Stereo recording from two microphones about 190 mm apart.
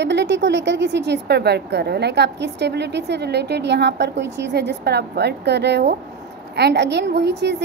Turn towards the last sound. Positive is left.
turn(degrees=-60)  # may be behind; listen again after turning